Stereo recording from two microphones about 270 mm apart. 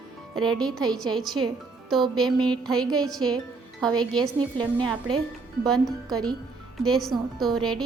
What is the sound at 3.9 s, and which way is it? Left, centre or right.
Speech, centre.